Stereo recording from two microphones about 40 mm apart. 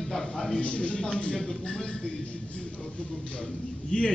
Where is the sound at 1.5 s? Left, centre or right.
Left.